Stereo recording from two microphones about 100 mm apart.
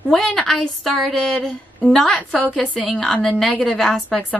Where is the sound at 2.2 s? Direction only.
15° left (ahead or behind).